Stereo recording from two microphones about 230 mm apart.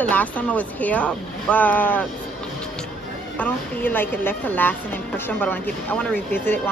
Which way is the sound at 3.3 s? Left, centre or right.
Centre.